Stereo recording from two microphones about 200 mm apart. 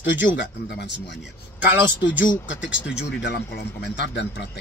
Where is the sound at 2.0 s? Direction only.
70° left (ahead or behind).